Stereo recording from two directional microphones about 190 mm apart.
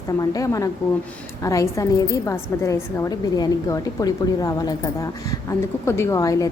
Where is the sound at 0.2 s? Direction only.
20° left (ahead or behind).